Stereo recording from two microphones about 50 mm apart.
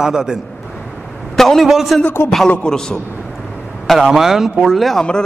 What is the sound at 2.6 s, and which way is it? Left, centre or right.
Speech, centre.